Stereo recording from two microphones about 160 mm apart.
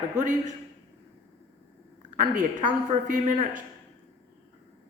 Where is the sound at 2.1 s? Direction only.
55° right (ahead or behind).